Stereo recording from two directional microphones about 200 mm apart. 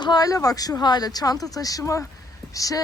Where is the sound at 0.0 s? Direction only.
20° left (ahead or behind).